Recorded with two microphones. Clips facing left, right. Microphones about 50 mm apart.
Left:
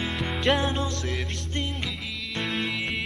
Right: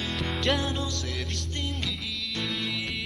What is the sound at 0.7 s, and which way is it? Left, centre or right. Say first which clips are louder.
Music: left 3 dB; left.